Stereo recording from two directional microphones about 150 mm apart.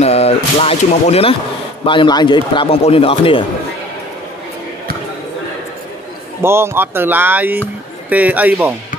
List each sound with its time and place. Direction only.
0.0 s speech: 45° left (ahead or behind)
1.9 s a man's voice: 30° left (ahead or behind)
6.4 s speech: 15° right (ahead or behind)